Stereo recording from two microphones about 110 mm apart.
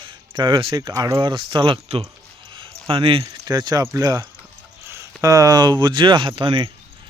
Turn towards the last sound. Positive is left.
turn(degrees=-50)  # may be behind; listen again after turning